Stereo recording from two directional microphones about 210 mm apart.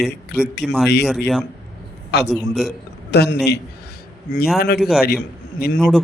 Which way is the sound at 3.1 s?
50° left (ahead or behind).